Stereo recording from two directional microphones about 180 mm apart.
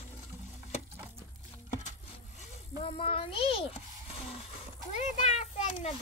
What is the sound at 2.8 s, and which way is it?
Speech, 30° left (ahead or behind).